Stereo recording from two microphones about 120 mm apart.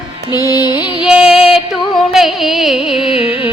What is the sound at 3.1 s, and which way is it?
Music, 50° left (ahead or behind).